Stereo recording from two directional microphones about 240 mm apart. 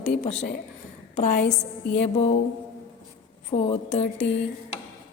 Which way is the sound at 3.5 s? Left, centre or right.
Left.